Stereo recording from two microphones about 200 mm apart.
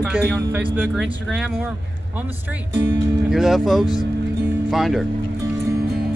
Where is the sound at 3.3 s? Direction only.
Centre (ahead or behind).